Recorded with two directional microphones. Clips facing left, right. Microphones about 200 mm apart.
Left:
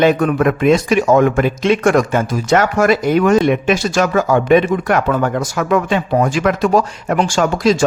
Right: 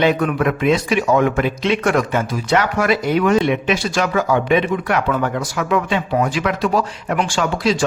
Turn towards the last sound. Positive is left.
turn(degrees=45)  # may be behind; listen again after turning